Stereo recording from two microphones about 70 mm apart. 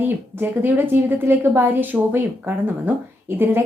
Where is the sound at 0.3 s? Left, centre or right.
Right.